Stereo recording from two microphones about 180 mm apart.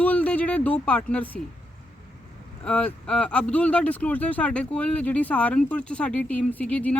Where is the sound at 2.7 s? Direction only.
5° left (ahead or behind).